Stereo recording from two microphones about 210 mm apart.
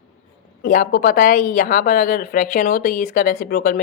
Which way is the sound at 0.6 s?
40° left (ahead or behind).